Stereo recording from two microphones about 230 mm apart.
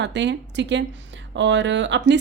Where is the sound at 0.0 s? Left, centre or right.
Right.